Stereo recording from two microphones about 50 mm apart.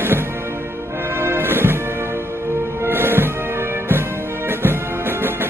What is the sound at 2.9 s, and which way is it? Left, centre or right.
Music, right.